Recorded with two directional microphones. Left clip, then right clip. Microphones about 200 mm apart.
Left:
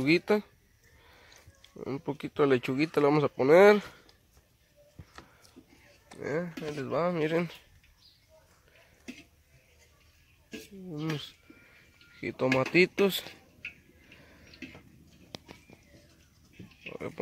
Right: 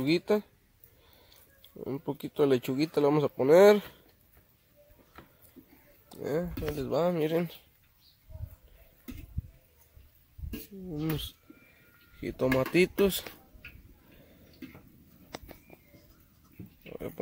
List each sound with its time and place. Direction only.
0.0 s speech: 5° right (ahead or behind)
1.6 s speech: 10° right (ahead or behind)
6.0 s speech: 20° right (ahead or behind)
11.0 s speech: 25° right (ahead or behind)
12.2 s speech: 15° right (ahead or behind)
16.8 s speech: 15° right (ahead or behind)